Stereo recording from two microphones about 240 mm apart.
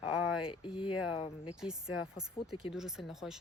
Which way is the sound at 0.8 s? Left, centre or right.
Left.